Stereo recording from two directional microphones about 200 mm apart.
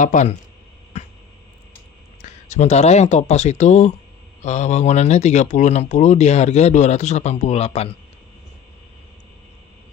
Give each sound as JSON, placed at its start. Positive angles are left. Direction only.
{"t": 0.0, "sound": "speech", "side_deg": 35}
{"t": 2.2, "sound": "speech", "side_deg": 35}